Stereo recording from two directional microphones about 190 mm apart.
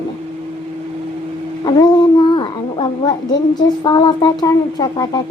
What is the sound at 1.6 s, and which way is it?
A child's voice, 20° left (ahead or behind).